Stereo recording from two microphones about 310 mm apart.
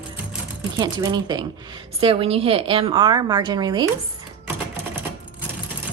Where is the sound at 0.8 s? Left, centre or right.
Centre.